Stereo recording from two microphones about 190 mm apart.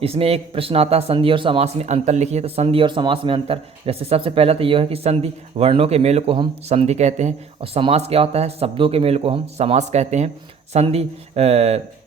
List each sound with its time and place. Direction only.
0.0 s a man's voice: 30° right (ahead or behind)